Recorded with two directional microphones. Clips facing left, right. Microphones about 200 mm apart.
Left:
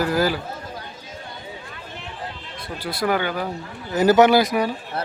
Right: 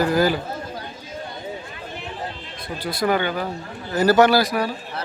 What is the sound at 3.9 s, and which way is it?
Speech, 20° left (ahead or behind).